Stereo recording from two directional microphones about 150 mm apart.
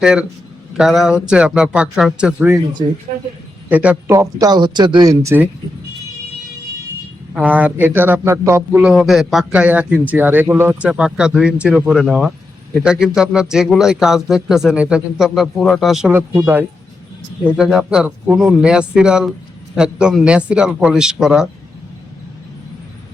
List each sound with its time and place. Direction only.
0.0 s speech: 5° right (ahead or behind)
3.7 s a man's voice: 10° right (ahead or behind)
4.1 s speech: 20° right (ahead or behind)
7.3 s a man's voice: 10° right (ahead or behind)
8.8 s a man's voice: centre (ahead or behind)
17.4 s speech: 5° right (ahead or behind)